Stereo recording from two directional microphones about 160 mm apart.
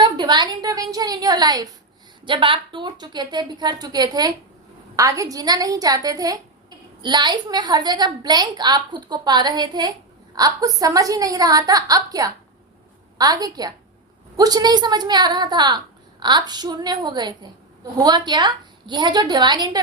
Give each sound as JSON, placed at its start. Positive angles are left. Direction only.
{"t": 0.0, "sound": "a woman's voice", "side_deg": -25}